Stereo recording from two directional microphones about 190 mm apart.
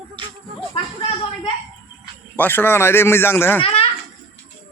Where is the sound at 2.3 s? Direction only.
10° left (ahead or behind).